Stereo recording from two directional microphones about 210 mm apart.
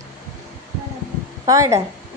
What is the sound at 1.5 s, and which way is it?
Speech, 15° right (ahead or behind).